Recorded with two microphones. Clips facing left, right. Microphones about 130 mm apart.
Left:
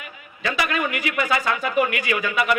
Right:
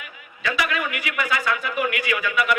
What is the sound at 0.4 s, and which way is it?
A man's voice, 30° left (ahead or behind).